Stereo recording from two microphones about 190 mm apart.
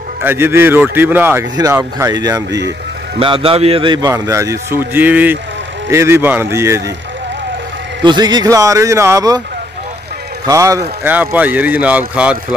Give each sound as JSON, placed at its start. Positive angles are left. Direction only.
{"t": 0.2, "sound": "speech", "side_deg": -10}
{"t": 3.2, "sound": "speech", "side_deg": -30}
{"t": 8.0, "sound": "speech", "side_deg": -25}
{"t": 10.4, "sound": "speech", "side_deg": -15}